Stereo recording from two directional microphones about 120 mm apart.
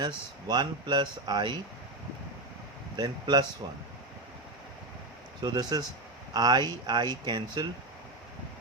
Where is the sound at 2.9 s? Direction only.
35° right (ahead or behind).